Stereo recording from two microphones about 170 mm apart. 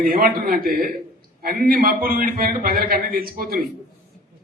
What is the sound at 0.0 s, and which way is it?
A man's voice, 55° right (ahead or behind).